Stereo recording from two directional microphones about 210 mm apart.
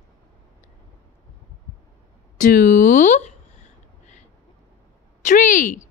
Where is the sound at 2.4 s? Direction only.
40° left (ahead or behind).